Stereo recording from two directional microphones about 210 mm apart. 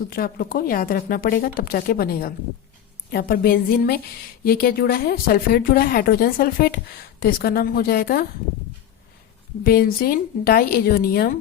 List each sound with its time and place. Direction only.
0.1 s speech: 45° left (ahead or behind)
9.6 s speech: 45° left (ahead or behind)